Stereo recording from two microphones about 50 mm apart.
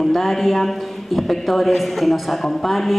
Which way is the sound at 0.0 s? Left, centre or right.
Centre.